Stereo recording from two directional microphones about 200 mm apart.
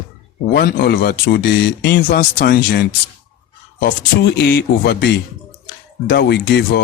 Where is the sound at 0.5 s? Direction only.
50° left (ahead or behind).